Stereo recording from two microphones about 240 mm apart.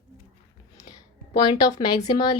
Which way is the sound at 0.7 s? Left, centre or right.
Centre.